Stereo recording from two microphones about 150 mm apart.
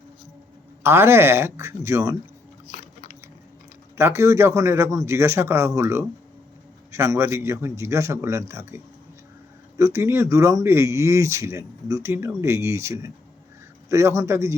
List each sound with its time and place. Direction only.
0.8 s a man's voice: 15° right (ahead or behind)
2.6 s biting: 55° left (ahead or behind)
3.9 s a man's voice: 15° right (ahead or behind)